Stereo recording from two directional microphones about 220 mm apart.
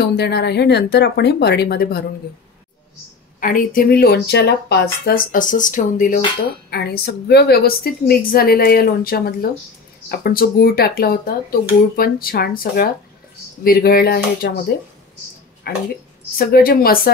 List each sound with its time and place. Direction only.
0.1 s a woman's voice: 45° left (ahead or behind)
3.3 s speech: 40° left (ahead or behind)
6.7 s a woman's voice: 45° left (ahead or behind)
15.7 s a woman's voice: 45° left (ahead or behind)